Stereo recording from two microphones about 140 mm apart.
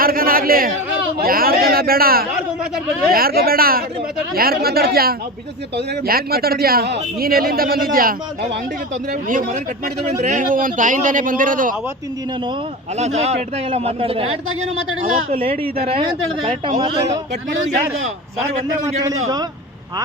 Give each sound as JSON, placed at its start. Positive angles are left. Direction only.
{"t": 0.0, "sound": "a sound", "side_deg": -90}
{"t": 3.1, "sound": "a man's voice", "side_deg": -90}
{"t": 10.1, "sound": "a man's voice", "side_deg": -60}
{"t": 13.0, "sound": "a man's voice", "side_deg": -50}
{"t": 19.0, "sound": "a man's voice", "side_deg": -25}